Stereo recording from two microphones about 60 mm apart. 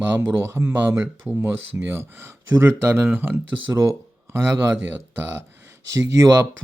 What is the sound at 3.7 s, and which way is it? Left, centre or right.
Speech, right.